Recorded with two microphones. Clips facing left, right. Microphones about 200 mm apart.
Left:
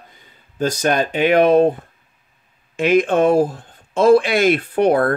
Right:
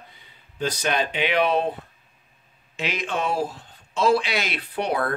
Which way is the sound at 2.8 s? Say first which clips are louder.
Left 13 dB; 50° left (ahead or behind).